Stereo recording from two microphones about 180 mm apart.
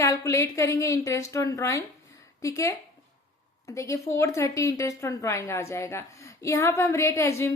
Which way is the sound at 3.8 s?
15° left (ahead or behind).